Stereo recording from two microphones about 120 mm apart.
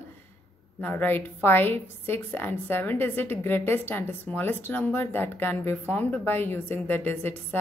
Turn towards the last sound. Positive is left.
turn(degrees=15)  # may be behind; listen again after turning